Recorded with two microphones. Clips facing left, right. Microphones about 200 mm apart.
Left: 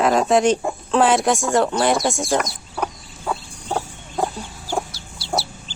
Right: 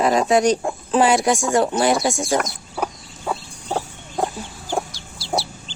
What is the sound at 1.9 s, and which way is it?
Speech, centre (ahead or behind).